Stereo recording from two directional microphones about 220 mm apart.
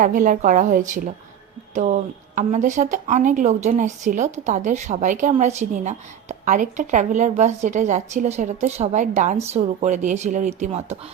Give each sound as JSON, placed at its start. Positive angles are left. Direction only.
{"t": 0.0, "sound": "a woman's voice", "side_deg": -35}